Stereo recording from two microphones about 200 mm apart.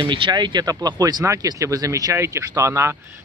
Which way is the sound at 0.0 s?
25° right (ahead or behind).